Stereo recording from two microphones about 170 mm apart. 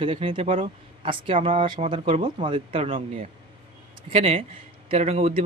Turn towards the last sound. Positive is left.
turn(degrees=-40)  # may be behind; listen again after turning